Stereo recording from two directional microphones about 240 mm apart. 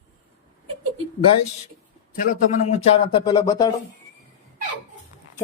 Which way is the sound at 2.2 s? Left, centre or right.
Left.